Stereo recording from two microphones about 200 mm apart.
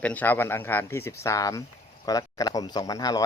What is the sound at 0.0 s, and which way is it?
Speech, 10° left (ahead or behind).